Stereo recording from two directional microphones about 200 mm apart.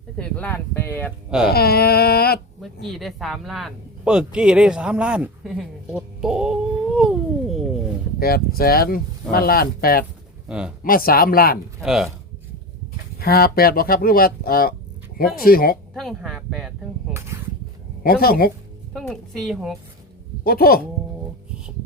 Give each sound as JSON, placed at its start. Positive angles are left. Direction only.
{"t": 0.2, "sound": "speech", "side_deg": 5}
{"t": 1.5, "sound": "speech", "side_deg": 50}
{"t": 2.6, "sound": "speech", "side_deg": 0}
{"t": 8.2, "sound": "speech", "side_deg": 50}
{"t": 10.5, "sound": "a woman's voice", "side_deg": 0}
{"t": 10.8, "sound": "speech", "side_deg": 45}
{"t": 11.8, "sound": "a woman's voice", "side_deg": 0}
{"t": 13.1, "sound": "speech", "side_deg": 50}
{"t": 16.0, "sound": "a sound", "side_deg": 0}
{"t": 18.0, "sound": "speech", "side_deg": 50}
{"t": 18.9, "sound": "a woman's voice", "side_deg": 5}
{"t": 20.4, "sound": "speech", "side_deg": 50}